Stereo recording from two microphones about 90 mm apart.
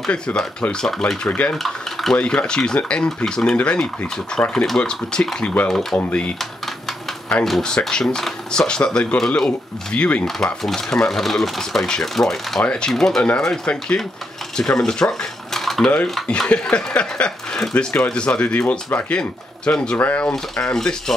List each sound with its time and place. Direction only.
0.0 s speech: 10° left (ahead or behind)
1.6 s a sound: 5° left (ahead or behind)
2.1 s speech: 10° left (ahead or behind)
5.9 s speech: 15° left (ahead or behind)
7.4 s speech: 5° left (ahead or behind)
10.2 s speech: centre (ahead or behind)
14.6 s cutlery: 5° left (ahead or behind)
16.3 s speech: 10° left (ahead or behind)